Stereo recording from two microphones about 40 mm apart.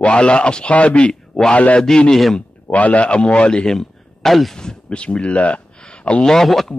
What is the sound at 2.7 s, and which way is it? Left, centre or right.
Speech, left.